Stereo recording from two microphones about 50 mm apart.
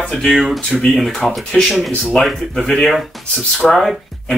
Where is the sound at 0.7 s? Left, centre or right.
Centre.